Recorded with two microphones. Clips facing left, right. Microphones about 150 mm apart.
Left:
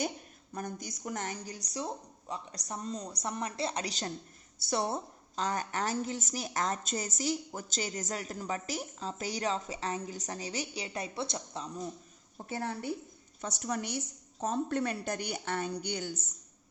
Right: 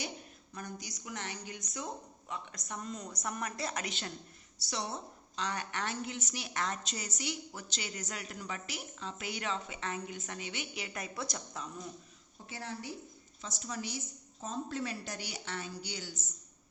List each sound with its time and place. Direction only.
0.5 s a woman's voice: 50° left (ahead or behind)
4.6 s a woman's voice: 50° left (ahead or behind); by 11.7 s 30° left (ahead or behind)
12.5 s a woman's voice: 50° left (ahead or behind)